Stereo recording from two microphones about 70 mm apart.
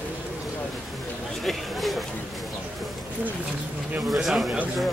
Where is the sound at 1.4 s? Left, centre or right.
Centre.